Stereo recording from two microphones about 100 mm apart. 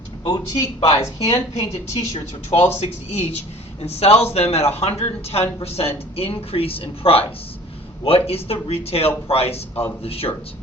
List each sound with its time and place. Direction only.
0.3 s speech: 35° left (ahead or behind)
0.8 s a man's voice: 85° left
6.1 s speech: 75° left (ahead or behind); by 9.8 s 90° left
10.0 s speech: 75° left (ahead or behind)